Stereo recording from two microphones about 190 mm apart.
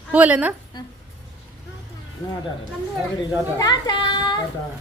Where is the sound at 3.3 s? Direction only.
20° left (ahead or behind).